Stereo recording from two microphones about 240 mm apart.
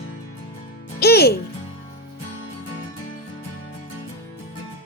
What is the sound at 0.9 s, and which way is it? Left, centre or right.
Music, left.